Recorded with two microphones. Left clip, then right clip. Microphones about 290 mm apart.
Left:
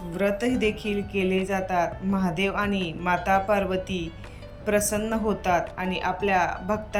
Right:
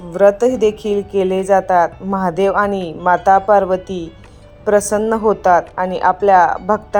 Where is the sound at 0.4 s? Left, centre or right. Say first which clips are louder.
Right 12 dB; right.